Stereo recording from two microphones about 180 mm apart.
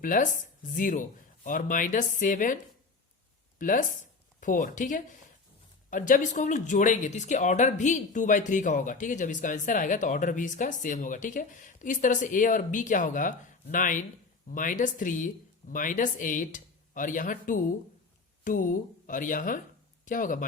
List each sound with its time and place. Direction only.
0.0 s speech: 50° left (ahead or behind)
3.6 s speech: 45° left (ahead or behind)